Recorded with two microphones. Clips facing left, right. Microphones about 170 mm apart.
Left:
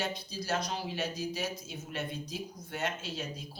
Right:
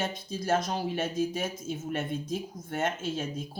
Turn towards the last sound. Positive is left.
turn(degrees=-50)  # may be behind; listen again after turning